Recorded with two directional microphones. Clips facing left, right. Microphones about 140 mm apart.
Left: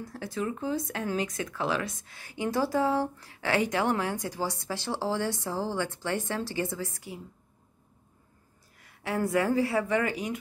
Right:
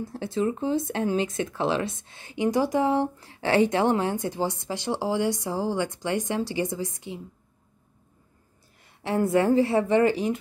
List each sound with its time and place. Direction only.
0.0 s speech: 25° right (ahead or behind)
8.8 s speech: 25° right (ahead or behind)